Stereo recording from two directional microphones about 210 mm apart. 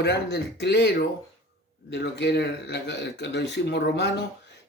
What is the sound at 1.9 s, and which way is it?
Speech, 55° left (ahead or behind).